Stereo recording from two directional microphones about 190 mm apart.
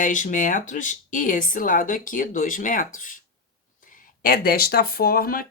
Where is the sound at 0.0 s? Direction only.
40° left (ahead or behind).